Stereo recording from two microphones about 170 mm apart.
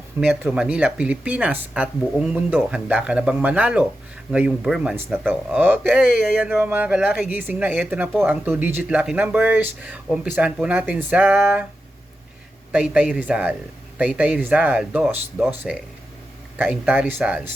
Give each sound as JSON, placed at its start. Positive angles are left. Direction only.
{"t": 0.3, "sound": "speech", "side_deg": -5}
{"t": 12.7, "sound": "speech", "side_deg": -5}